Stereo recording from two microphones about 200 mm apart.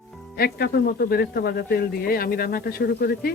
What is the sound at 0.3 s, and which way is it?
Speech, 50° left (ahead or behind).